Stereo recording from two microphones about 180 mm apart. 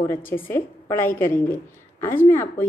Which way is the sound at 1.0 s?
50° left (ahead or behind).